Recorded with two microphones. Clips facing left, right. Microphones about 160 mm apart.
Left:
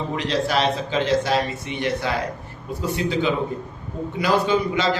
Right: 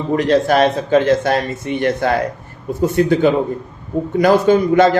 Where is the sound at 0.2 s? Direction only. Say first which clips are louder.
Right 9 dB; 50° right (ahead or behind).